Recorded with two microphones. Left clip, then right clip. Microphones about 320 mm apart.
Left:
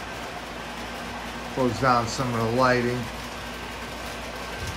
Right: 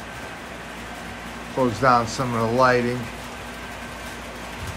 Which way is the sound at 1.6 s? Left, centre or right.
Centre.